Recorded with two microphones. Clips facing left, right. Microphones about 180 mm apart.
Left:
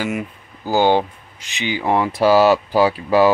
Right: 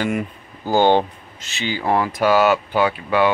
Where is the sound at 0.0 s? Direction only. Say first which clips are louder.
Right 1 dB; 5° left (ahead or behind).